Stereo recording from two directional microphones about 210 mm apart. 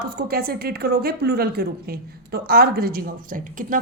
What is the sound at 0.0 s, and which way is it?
A woman's voice, 45° right (ahead or behind).